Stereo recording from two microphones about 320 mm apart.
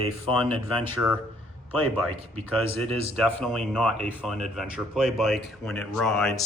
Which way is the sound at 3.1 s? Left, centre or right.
Centre.